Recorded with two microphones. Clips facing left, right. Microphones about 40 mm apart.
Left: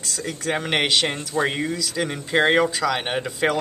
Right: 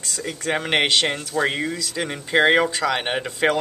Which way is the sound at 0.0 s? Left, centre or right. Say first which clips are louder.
Even; centre.